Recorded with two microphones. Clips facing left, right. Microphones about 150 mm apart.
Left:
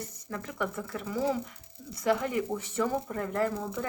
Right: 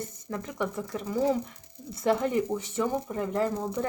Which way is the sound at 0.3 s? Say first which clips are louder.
Right 2 dB; 20° right (ahead or behind).